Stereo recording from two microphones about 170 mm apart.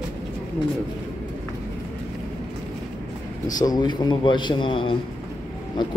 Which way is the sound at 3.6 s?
25° left (ahead or behind).